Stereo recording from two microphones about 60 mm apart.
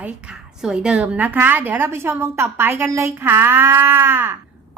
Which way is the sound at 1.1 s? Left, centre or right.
Right.